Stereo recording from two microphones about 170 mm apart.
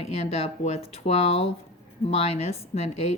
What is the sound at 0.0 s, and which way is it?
Speech, 40° left (ahead or behind).